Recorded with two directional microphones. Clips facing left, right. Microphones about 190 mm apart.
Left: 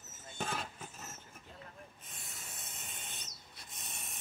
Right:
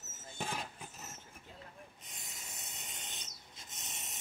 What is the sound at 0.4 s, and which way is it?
Vehicle, 15° right (ahead or behind).